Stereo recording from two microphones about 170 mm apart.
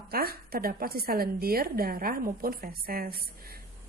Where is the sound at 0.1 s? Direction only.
60° right (ahead or behind).